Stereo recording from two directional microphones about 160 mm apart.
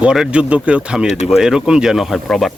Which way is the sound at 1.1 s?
45° left (ahead or behind).